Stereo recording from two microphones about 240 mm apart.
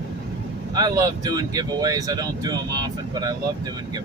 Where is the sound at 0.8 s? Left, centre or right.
Centre.